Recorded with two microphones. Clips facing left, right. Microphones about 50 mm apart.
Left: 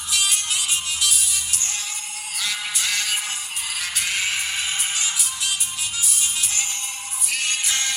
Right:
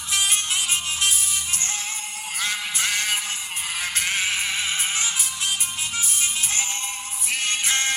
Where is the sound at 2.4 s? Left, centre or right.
Right.